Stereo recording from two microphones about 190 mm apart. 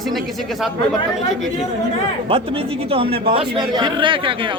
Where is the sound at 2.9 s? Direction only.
30° right (ahead or behind).